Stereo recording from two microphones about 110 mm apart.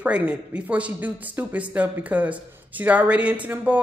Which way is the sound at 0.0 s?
15° right (ahead or behind).